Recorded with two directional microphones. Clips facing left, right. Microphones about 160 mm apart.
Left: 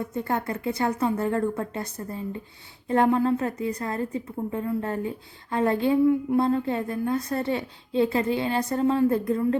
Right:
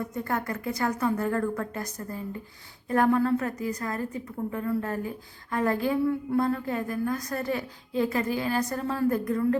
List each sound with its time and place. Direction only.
0.1 s a woman's voice: 25° left (ahead or behind)